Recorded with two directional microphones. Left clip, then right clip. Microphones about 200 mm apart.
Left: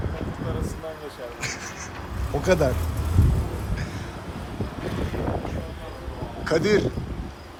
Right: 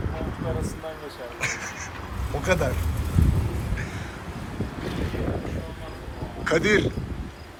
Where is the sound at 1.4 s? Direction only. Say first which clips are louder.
Right 4 dB; 5° left (ahead or behind).